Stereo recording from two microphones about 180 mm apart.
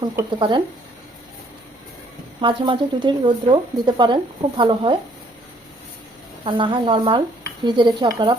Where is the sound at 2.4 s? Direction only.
25° right (ahead or behind).